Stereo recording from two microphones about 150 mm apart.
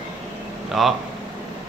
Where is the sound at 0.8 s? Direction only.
Centre (ahead or behind).